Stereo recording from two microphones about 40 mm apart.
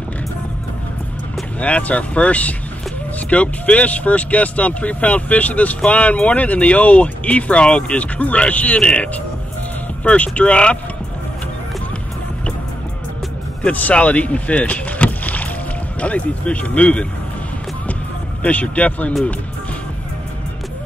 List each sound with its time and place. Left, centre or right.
1.6 s speech: left
10.0 s speech: left
13.7 s speech: left
18.4 s speech: left